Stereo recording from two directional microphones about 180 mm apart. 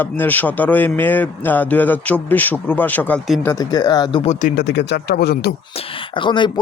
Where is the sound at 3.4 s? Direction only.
20° left (ahead or behind).